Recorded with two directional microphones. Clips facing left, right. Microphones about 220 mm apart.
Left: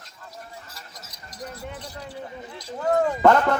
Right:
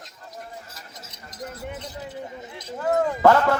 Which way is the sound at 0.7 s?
20° right (ahead or behind).